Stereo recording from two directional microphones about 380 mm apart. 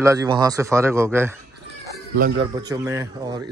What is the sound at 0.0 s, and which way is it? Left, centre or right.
A man's voice, centre.